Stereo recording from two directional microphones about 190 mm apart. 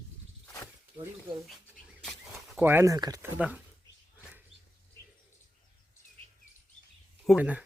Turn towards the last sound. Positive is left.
turn(degrees=-5)  # may be behind; listen again after turning